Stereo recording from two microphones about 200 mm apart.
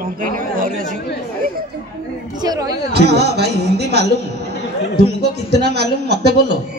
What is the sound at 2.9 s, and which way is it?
A man's voice, 55° right (ahead or behind).